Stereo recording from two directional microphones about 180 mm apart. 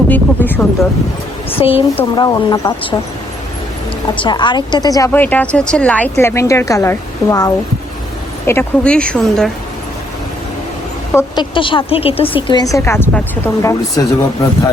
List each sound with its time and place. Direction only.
0.1 s speech: 10° left (ahead or behind)
1.5 s a woman's voice: 30° left (ahead or behind)
4.2 s speech: 25° left (ahead or behind); by 9.5 s centre (ahead or behind)
11.1 s a sound: 15° left (ahead or behind)
11.5 s a woman's voice: 30° left (ahead or behind)